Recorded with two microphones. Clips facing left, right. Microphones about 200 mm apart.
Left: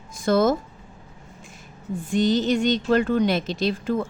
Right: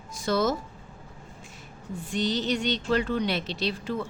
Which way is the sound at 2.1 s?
50° left (ahead or behind).